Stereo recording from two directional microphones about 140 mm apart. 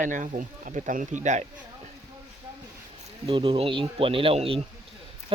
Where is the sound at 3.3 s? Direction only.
40° right (ahead or behind).